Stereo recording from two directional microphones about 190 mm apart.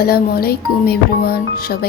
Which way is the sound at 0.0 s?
55° left (ahead or behind).